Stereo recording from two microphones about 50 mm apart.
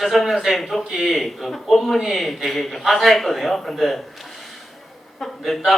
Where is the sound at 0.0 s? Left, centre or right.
Centre.